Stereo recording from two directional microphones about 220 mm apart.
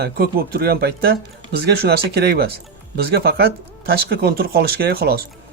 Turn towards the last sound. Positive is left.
turn(degrees=-45)  # may be behind; listen again after turning